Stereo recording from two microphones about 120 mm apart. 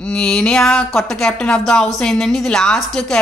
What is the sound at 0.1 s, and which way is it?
A woman's voice, 5° left (ahead or behind).